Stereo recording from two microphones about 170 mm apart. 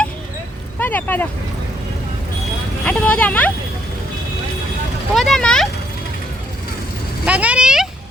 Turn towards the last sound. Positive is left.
turn(degrees=-5)  # may be behind; listen again after turning